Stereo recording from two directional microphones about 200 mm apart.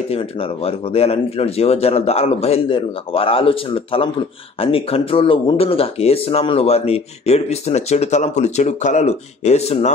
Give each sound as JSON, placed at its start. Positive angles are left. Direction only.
{"t": 0.1, "sound": "a man's voice", "side_deg": 30}